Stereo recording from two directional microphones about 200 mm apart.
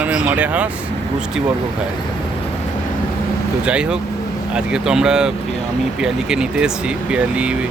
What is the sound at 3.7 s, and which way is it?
Speech, 5° right (ahead or behind).